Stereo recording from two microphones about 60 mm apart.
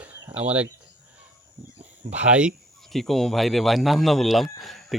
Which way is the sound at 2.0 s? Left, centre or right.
Right.